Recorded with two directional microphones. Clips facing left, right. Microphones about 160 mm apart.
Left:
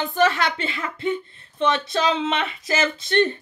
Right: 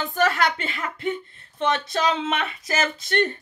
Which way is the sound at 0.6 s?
45° right (ahead or behind).